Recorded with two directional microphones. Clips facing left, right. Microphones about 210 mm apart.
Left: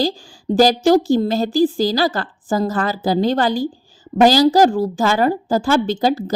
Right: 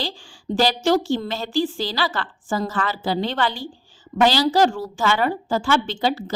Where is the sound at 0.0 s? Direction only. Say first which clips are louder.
Left 10 dB; 40° left (ahead or behind).